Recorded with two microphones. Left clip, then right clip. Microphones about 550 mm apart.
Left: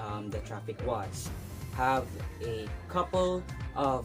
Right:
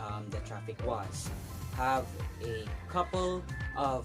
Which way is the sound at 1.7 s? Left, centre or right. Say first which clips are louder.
Left 2 dB; right.